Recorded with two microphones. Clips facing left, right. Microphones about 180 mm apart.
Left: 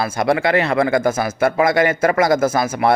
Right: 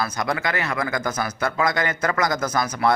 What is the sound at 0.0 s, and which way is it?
Speech, 25° left (ahead or behind).